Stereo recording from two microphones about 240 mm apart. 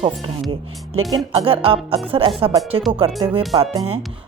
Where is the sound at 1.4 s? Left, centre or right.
Right.